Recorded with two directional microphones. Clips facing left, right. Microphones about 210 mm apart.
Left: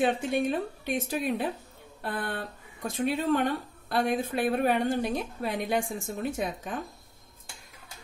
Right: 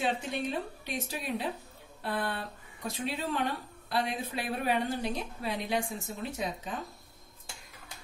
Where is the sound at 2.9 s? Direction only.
50° left (ahead or behind).